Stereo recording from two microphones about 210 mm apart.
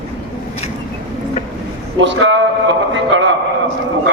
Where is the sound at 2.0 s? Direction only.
60° right (ahead or behind).